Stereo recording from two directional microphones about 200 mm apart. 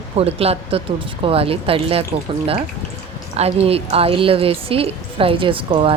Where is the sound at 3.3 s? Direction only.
30° right (ahead or behind).